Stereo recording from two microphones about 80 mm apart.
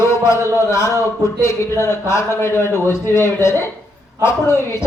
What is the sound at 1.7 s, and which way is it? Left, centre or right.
Speech, left.